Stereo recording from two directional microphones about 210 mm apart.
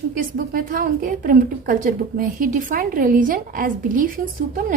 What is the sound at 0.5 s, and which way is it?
A woman's voice, 40° right (ahead or behind).